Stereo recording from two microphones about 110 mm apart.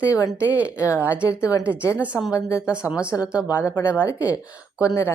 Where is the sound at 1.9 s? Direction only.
10° right (ahead or behind).